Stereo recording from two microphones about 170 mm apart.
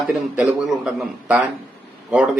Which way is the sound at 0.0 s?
Centre (ahead or behind).